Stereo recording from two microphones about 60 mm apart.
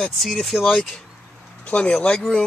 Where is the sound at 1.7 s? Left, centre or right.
Centre.